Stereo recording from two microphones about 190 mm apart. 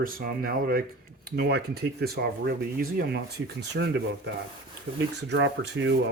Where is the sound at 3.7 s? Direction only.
65° right (ahead or behind).